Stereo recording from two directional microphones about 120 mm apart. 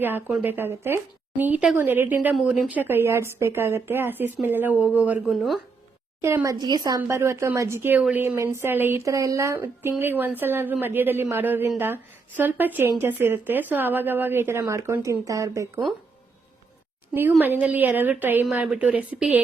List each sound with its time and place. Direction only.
0.0 s speech: 15° right (ahead or behind)
2.3 s a woman's voice: 5° right (ahead or behind)
5.3 s speech: centre (ahead or behind)
6.2 s a woman's voice: 25° right (ahead or behind)
17.4 s speech: 15° right (ahead or behind)